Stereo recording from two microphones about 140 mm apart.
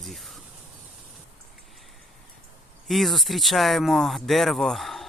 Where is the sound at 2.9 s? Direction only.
Centre (ahead or behind).